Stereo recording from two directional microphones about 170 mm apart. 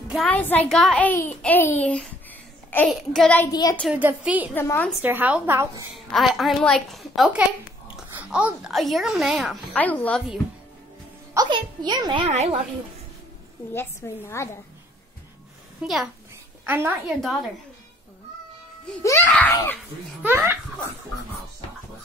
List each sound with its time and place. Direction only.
0.1 s a child's voice: 5° left (ahead or behind)
3.9 s a woman's voice: 10° right (ahead or behind)
4.6 s a child's voice: 10° left (ahead or behind)
5.0 s a woman's voice: 10° right (ahead or behind)
5.9 s speech: centre (ahead or behind)
11.3 s a child's voice: 25° right (ahead or behind)
12.3 s speech: 40° right (ahead or behind)
13.7 s a child's voice: 15° left (ahead or behind)
15.8 s a woman's voice: 5° right (ahead or behind)
19.0 s a child's voice: 10° left (ahead or behind)
20.2 s a woman's voice: 15° right (ahead or behind)